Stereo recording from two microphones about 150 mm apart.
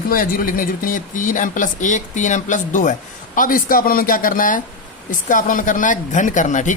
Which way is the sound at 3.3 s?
65° left (ahead or behind).